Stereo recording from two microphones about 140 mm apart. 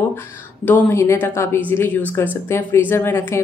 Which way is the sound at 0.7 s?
15° left (ahead or behind).